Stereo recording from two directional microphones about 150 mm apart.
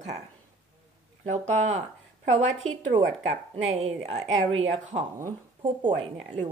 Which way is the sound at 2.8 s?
50° right (ahead or behind).